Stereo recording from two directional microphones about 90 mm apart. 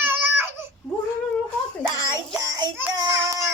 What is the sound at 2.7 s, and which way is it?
Child singing, 30° right (ahead or behind).